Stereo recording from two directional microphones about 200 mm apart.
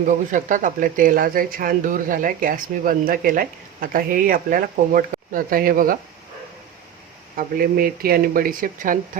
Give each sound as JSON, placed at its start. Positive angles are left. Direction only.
{"t": 0.1, "sound": "speech", "side_deg": -40}
{"t": 7.3, "sound": "speech", "side_deg": -45}